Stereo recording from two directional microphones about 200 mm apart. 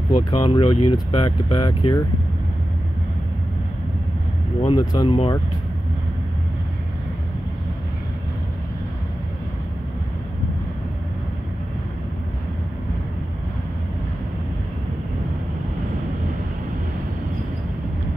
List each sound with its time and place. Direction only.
0.1 s speech: 20° left (ahead or behind)
4.6 s speech: 20° left (ahead or behind)